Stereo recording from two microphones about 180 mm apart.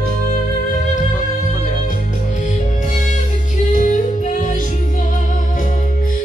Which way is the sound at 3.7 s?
45° left (ahead or behind).